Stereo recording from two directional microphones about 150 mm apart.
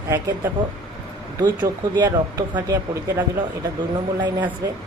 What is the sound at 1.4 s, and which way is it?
Speech, 30° right (ahead or behind).